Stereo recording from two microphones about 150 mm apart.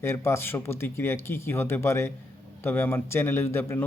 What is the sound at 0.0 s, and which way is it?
A man's voice, 15° left (ahead or behind).